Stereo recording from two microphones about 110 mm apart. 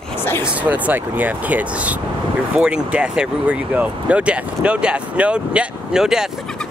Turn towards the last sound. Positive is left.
turn(degrees=-5)  # may be behind; listen again after turning